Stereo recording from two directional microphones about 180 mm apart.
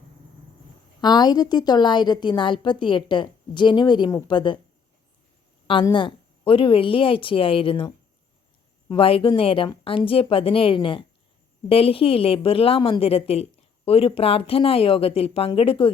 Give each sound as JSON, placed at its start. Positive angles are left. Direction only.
{"t": 1.0, "sound": "a woman's voice", "side_deg": 25}
{"t": 5.6, "sound": "a woman's voice", "side_deg": 25}
{"t": 8.9, "sound": "a woman's voice", "side_deg": 30}